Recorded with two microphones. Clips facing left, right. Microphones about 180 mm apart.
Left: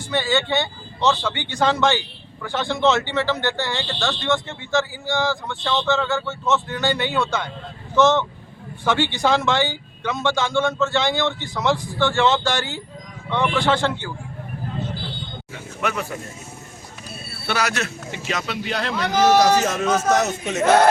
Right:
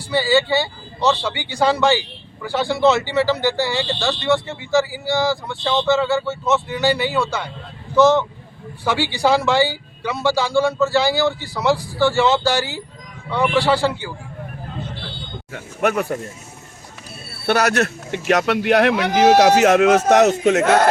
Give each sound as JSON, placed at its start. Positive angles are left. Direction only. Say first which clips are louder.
{"t": 0.1, "sound": "speech", "louder": "right 4 dB", "side_deg": -5}
{"t": 6.7, "sound": "speech", "louder": "right 4 dB", "side_deg": -5}
{"t": 15.5, "sound": "speech", "louder": "right 6 dB", "side_deg": -50}
{"t": 17.4, "sound": "speech", "louder": "right 7 dB", "side_deg": -50}